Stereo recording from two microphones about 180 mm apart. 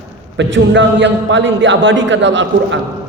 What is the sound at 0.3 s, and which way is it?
A man's voice, 90° right.